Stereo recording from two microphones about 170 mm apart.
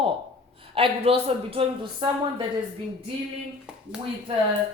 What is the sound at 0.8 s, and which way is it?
A woman's voice, 35° right (ahead or behind).